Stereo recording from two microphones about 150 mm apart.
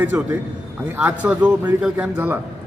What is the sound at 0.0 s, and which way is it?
A man's voice, 10° right (ahead or behind).